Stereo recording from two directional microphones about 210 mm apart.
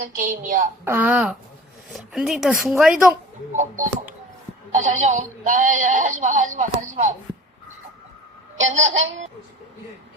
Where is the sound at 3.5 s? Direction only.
35° right (ahead or behind).